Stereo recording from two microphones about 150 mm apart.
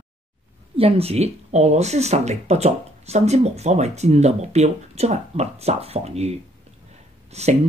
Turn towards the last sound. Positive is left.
turn(degrees=-45)  # may be behind; listen again after turning